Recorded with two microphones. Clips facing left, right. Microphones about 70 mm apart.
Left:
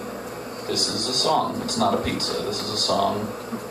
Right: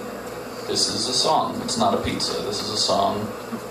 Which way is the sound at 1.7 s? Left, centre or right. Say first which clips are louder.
Right 1 dB; left.